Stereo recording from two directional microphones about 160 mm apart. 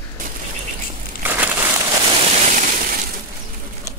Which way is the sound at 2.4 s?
50° right (ahead or behind).